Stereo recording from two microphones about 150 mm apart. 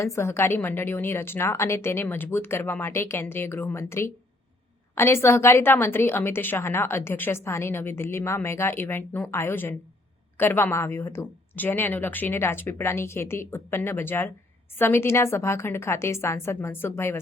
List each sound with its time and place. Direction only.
0.0 s a woman's voice: 20° left (ahead or behind)